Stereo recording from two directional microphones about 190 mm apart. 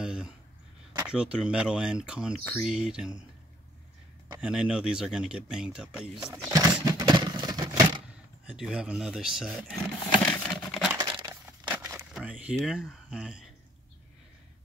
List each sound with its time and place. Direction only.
0.0 s a sound: 5° right (ahead or behind)
0.9 s speech: 5° right (ahead or behind)
4.4 s speech: 5° right (ahead or behind)
6.1 s speech: 20° right (ahead or behind)
6.5 s a sound: 20° right (ahead or behind)
8.5 s speech: 5° right (ahead or behind)
10.2 s patter: 5° left (ahead or behind)
11.0 s crumpling: 25° right (ahead or behind)
11.7 s a sound: 10° right (ahead or behind)